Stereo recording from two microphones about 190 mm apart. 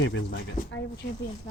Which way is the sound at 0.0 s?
70° left (ahead or behind).